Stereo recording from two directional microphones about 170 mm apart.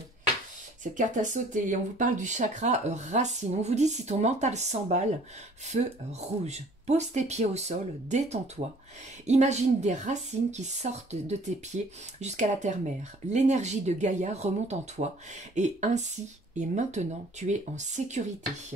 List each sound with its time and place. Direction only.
0.9 s speech: 45° right (ahead or behind)